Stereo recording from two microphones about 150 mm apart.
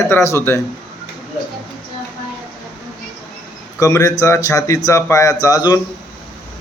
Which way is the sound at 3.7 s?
20° left (ahead or behind).